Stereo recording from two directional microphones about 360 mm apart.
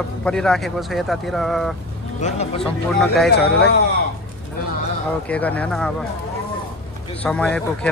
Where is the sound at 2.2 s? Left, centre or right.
Centre.